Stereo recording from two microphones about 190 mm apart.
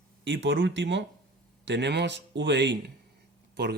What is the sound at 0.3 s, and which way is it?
Speech, 70° right (ahead or behind).